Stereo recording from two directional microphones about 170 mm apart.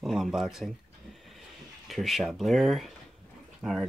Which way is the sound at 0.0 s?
Centre (ahead or behind).